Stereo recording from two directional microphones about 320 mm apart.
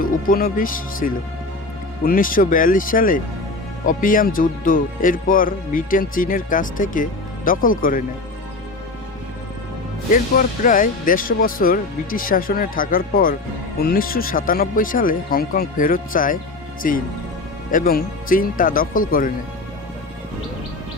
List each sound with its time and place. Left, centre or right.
0.0 s speech: left
10.1 s speech: left
17.7 s speech: left